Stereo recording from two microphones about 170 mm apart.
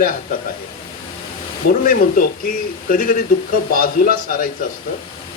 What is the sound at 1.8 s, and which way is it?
Speech, 55° left (ahead or behind).